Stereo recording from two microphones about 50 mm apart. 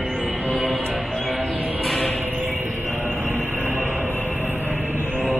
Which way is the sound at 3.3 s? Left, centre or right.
Right.